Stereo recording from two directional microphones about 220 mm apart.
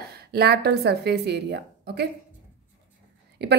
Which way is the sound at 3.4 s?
50° right (ahead or behind).